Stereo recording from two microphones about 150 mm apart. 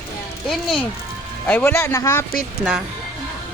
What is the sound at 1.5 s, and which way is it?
Speech, 15° left (ahead or behind).